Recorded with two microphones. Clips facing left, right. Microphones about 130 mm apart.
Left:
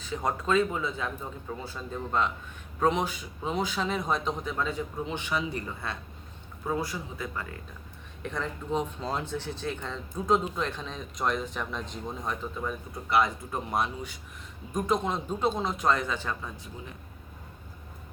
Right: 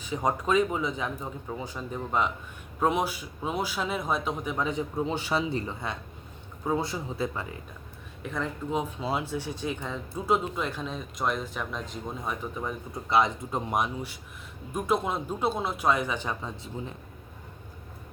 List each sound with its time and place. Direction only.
0.0 s speech: 15° right (ahead or behind)
5.0 s speech: 35° right (ahead or behind)
8.2 s speech: 5° right (ahead or behind); by 16.9 s 20° right (ahead or behind)